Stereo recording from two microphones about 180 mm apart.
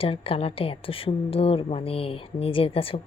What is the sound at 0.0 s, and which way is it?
A woman's voice, 30° left (ahead or behind).